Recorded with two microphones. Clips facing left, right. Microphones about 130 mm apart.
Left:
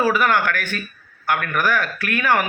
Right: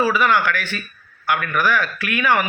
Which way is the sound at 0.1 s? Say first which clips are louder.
Right 1 dB; 50° left (ahead or behind).